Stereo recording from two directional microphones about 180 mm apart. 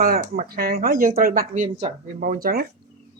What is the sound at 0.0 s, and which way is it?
Speech, 55° right (ahead or behind).